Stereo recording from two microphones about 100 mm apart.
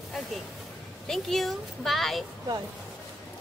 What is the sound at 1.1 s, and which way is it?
Speech, 5° left (ahead or behind).